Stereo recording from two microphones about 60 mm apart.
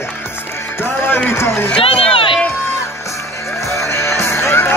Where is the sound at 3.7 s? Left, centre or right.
Left.